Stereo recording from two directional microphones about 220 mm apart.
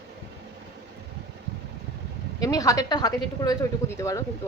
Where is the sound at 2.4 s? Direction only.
15° left (ahead or behind).